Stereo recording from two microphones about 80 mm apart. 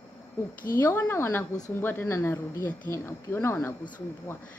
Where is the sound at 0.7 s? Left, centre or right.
Left.